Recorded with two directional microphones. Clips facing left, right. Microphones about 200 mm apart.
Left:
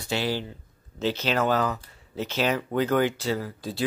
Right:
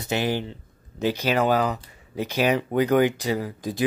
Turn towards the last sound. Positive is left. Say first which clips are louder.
# right 3 dB
turn(degrees=-15)  # may be behind; listen again after turning